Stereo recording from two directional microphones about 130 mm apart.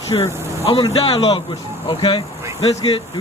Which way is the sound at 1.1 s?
40° left (ahead or behind).